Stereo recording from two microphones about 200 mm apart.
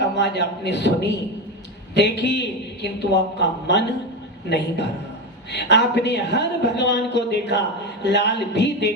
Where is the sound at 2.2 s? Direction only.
60° left (ahead or behind).